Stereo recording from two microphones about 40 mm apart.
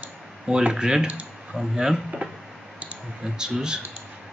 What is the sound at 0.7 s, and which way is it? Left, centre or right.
Speech, centre.